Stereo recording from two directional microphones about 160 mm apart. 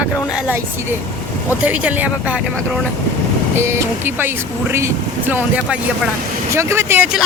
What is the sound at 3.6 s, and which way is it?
Speech, 15° right (ahead or behind).